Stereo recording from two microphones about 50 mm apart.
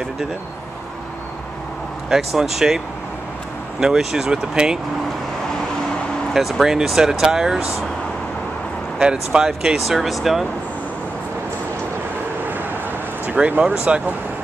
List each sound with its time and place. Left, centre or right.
2.0 s speech: centre
3.8 s speech: centre
6.6 s speech: centre
8.9 s speech: centre
13.5 s speech: right